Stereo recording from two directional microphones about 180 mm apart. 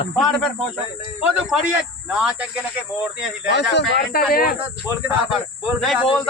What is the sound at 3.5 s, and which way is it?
Speech, 70° left (ahead or behind).